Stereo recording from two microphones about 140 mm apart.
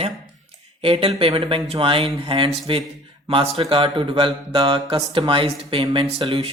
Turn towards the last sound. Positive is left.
turn(degrees=-40)  # may be behind; listen again after turning